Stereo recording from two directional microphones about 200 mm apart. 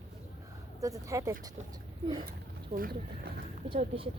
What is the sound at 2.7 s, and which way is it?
Speech, 45° right (ahead or behind).